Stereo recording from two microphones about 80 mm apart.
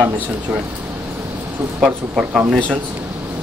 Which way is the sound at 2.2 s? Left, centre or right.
Centre.